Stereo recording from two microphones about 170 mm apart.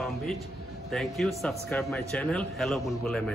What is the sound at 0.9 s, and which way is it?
A man's voice, centre (ahead or behind).